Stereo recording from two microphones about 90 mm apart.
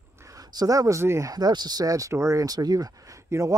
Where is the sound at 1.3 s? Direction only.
50° right (ahead or behind).